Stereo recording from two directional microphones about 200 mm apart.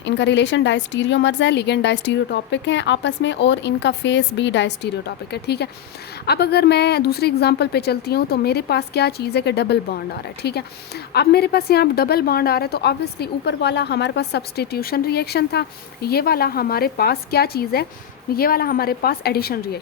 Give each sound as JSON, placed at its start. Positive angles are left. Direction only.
{"t": 0.0, "sound": "a woman's voice", "side_deg": 60}